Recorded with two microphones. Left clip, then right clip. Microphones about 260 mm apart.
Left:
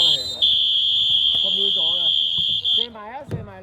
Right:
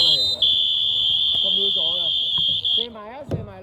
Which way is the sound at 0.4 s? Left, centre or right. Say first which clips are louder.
Left 5 dB; centre.